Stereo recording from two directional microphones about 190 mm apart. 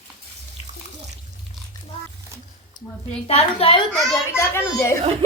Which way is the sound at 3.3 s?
30° left (ahead or behind).